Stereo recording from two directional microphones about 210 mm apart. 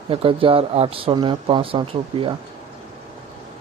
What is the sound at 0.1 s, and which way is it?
Speech, 25° right (ahead or behind).